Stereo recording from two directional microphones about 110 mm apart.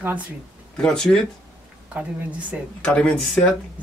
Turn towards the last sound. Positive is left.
turn(degrees=10)  # may be behind; listen again after turning